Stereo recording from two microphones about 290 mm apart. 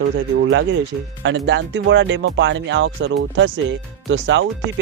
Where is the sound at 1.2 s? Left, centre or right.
Right.